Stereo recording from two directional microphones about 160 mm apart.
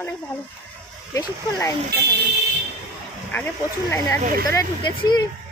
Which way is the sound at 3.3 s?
15° left (ahead or behind).